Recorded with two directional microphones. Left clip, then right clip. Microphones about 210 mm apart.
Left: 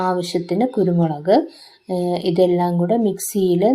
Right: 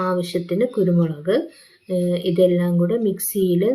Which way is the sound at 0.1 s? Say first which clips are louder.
Left 2 dB; 15° left (ahead or behind).